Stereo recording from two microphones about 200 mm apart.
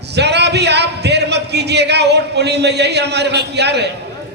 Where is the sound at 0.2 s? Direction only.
55° right (ahead or behind).